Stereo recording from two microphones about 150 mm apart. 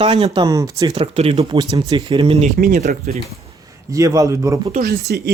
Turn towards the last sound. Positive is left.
turn(degrees=-90)